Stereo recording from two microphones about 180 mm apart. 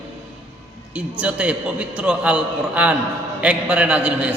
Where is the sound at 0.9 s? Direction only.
5° right (ahead or behind).